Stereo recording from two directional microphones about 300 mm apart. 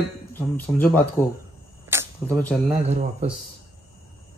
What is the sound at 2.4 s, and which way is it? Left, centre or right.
Speech, centre.